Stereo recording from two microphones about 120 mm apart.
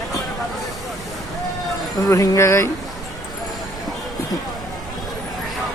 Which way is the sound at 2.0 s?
30° left (ahead or behind).